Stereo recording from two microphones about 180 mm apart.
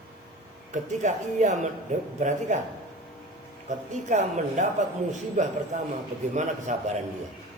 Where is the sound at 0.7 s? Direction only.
40° right (ahead or behind).